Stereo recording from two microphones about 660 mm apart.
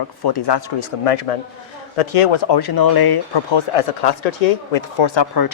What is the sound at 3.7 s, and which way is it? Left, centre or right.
Speech, left.